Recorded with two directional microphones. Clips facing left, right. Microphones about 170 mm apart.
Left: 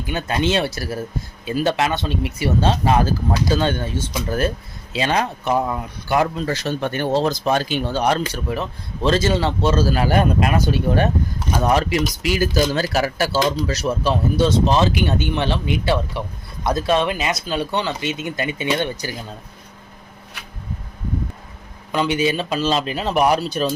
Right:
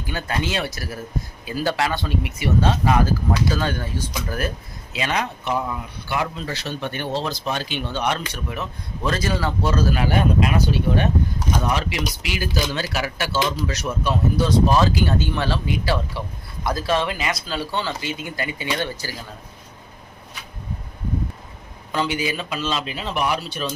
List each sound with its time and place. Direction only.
0.0 s speech: 20° left (ahead or behind); by 10.5 s 40° left (ahead or behind)
11.6 s speech: 45° left (ahead or behind); by 19.1 s 20° left (ahead or behind)
21.9 s speech: 20° left (ahead or behind); by 23.7 s 40° left (ahead or behind)